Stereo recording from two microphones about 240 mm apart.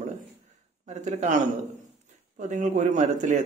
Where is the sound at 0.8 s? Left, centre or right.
Right.